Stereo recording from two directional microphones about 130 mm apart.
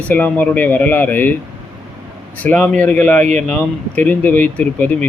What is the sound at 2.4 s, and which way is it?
Speech, 10° left (ahead or behind).